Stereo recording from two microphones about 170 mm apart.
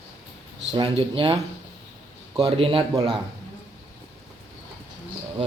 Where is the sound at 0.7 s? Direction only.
30° right (ahead or behind).